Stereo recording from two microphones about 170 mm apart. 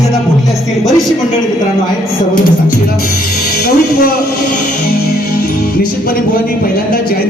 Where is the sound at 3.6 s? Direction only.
60° left (ahead or behind).